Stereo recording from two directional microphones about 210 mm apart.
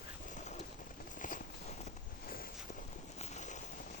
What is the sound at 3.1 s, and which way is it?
Boat, 35° left (ahead or behind).